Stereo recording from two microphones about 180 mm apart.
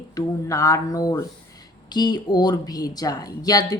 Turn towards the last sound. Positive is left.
turn(degrees=20)  # may be behind; listen again after turning